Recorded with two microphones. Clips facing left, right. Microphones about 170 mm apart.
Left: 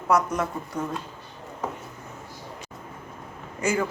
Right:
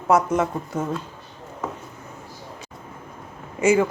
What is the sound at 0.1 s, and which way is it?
Speech, 25° right (ahead or behind).